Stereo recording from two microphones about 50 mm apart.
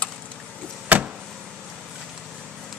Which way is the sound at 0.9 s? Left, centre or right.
Right.